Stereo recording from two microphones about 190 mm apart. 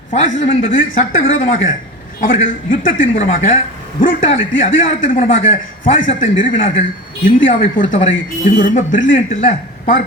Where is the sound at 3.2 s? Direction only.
45° left (ahead or behind).